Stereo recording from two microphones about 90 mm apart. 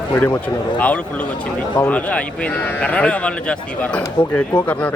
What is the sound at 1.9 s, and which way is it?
Speech, 15° left (ahead or behind).